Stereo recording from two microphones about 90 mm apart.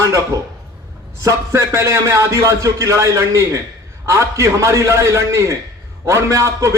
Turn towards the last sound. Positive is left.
turn(degrees=-35)  # may be behind; listen again after turning